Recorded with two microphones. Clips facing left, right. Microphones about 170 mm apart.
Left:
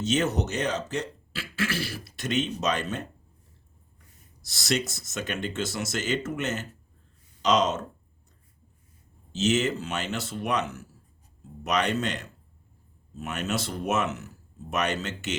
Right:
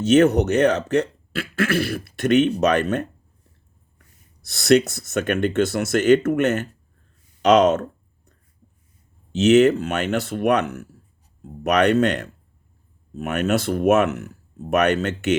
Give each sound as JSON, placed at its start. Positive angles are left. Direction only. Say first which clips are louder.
{"t": 0.0, "sound": "speech", "louder": "right 11 dB", "side_deg": -60}
{"t": 4.4, "sound": "speech", "louder": "right 12 dB", "side_deg": -60}
{"t": 9.3, "sound": "speech", "louder": "right 11 dB", "side_deg": -60}